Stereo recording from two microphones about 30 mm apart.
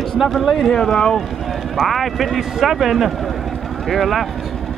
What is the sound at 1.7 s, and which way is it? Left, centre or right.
Speech, centre.